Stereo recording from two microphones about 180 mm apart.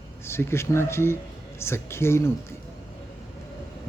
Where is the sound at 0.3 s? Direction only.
15° left (ahead or behind).